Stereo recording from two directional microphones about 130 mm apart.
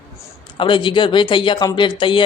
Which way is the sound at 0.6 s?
40° left (ahead or behind).